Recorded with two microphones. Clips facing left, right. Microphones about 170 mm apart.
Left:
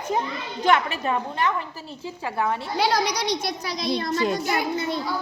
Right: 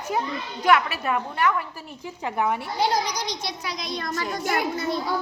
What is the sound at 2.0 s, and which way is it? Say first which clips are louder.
Speech: right 1 dB; 15° right (ahead or behind).